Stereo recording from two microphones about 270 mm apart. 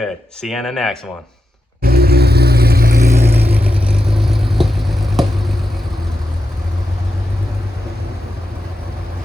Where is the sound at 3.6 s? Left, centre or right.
Centre.